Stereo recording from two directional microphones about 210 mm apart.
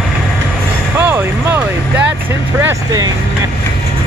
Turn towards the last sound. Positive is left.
turn(degrees=-15)  # may be behind; listen again after turning